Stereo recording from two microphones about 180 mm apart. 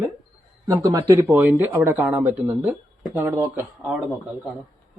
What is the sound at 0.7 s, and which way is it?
Speech, 20° right (ahead or behind).